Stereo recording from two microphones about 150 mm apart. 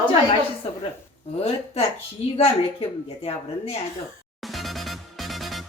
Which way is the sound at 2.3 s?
40° left (ahead or behind).